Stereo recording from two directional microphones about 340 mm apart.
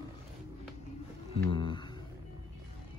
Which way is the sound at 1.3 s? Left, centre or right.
Centre.